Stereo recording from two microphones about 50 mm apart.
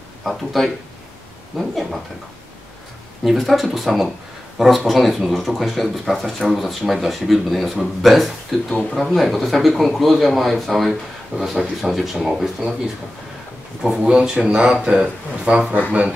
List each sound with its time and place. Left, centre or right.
0.2 s speech: centre
3.3 s speech: centre; by 15.6 s right